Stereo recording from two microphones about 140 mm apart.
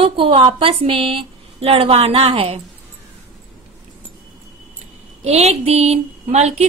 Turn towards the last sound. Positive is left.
turn(degrees=-50)  # may be behind; listen again after turning